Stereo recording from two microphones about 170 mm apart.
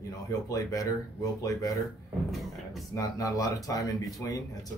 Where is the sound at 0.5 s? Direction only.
20° left (ahead or behind).